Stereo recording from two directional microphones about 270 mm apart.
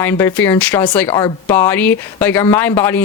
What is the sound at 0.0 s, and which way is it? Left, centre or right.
Speech, centre.